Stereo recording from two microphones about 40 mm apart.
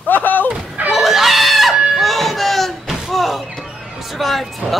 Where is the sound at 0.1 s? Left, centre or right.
Left.